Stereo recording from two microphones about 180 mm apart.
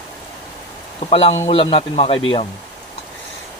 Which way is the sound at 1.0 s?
30° left (ahead or behind).